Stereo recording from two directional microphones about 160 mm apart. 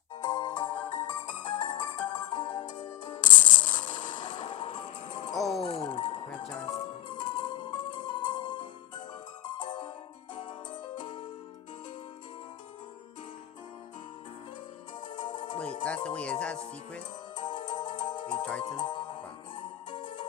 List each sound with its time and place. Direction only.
0.2 s music: 25° left (ahead or behind)
3.5 s a sound: 50° left (ahead or behind)
4.4 s music: 35° left (ahead or behind)
10.9 s music: 30° left (ahead or behind)
15.0 s music: 30° left (ahead or behind)
15.5 s music: 10° left (ahead or behind)
17.3 s music: 30° left (ahead or behind)